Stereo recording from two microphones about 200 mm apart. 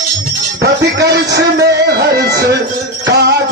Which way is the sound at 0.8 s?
55° right (ahead or behind).